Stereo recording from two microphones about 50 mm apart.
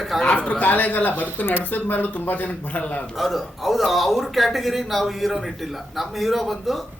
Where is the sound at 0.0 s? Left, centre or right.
Centre.